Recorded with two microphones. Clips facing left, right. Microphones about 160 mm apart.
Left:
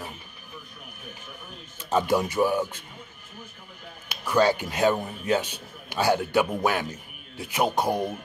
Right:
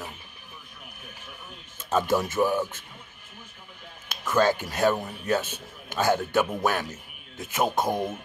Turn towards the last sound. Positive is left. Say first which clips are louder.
# left 1 dB
turn(degrees=10)  # may be behind; listen again after turning